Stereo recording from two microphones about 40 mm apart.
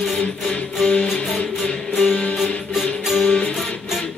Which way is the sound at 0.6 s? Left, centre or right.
Left.